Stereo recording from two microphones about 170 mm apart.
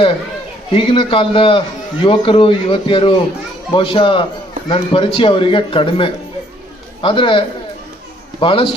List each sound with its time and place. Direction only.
0.7 s a man's voice: 30° left (ahead or behind)